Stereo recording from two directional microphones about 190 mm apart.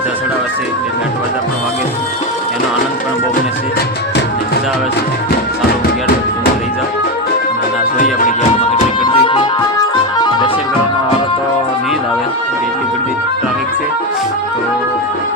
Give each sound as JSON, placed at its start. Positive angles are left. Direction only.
{"t": 9.0, "sound": "music", "side_deg": 30}